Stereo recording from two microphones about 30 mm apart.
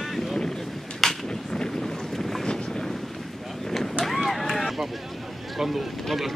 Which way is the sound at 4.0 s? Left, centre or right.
Centre.